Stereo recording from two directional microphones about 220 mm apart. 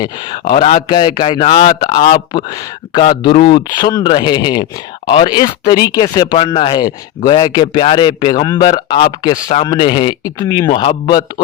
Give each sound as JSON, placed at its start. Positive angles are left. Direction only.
{"t": 0.0, "sound": "speech", "side_deg": 20}
{"t": 9.3, "sound": "speech", "side_deg": 30}
{"t": 9.6, "sound": "speech", "side_deg": 20}